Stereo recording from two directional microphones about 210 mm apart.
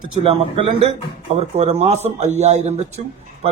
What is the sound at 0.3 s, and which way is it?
A man's voice, 25° right (ahead or behind).